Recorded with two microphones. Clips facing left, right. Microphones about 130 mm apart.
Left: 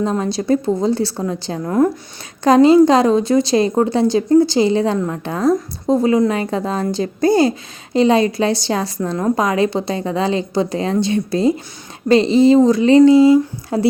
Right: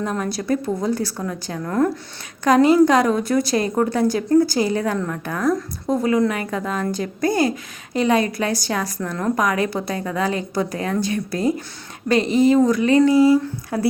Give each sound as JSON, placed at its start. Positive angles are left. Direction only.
{"t": 0.0, "sound": "a woman's voice", "side_deg": 25}